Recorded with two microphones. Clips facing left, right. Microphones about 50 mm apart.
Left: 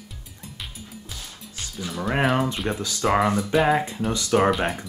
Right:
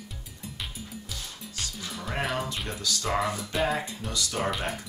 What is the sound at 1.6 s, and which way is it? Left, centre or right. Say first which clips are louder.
Music: left 6 dB; centre.